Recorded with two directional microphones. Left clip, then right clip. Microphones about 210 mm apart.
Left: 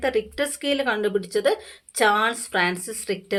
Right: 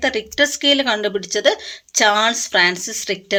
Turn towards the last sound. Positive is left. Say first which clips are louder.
# right 5 dB
turn(degrees=-35)  # may be behind; listen again after turning